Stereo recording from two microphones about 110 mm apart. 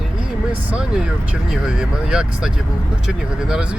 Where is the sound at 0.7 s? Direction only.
10° right (ahead or behind).